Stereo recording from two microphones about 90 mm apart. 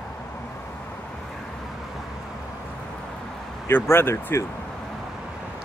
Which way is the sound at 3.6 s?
25° left (ahead or behind).